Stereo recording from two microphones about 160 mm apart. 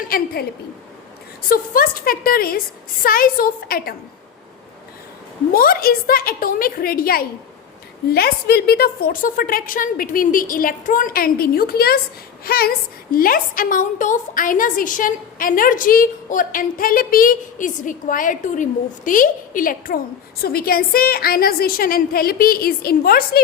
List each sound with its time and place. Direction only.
0.0 s a woman's voice: 65° left (ahead or behind)
1.5 s a woman's voice: 60° left (ahead or behind)
5.5 s a woman's voice: 65° left (ahead or behind)
20.4 s a woman's voice: 70° left (ahead or behind)